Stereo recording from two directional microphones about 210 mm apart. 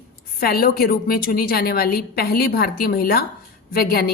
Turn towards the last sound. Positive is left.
turn(degrees=45)  # may be behind; listen again after turning